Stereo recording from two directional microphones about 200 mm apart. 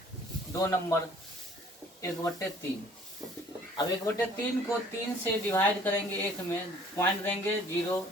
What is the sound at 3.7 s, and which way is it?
Speech, 15° left (ahead or behind).